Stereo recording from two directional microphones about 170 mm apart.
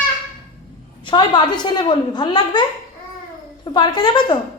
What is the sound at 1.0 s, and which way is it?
A woman's voice, 25° left (ahead or behind).